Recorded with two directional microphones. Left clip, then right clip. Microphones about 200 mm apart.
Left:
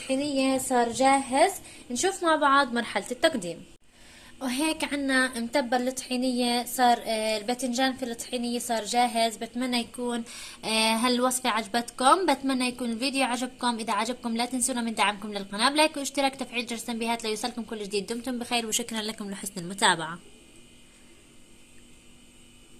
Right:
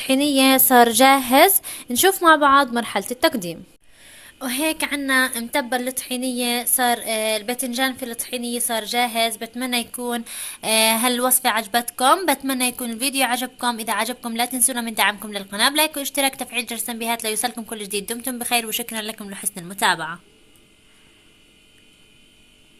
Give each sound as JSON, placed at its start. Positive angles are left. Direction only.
{"t": 0.1, "sound": "a woman's voice", "side_deg": -45}
{"t": 4.1, "sound": "a woman's voice", "side_deg": -10}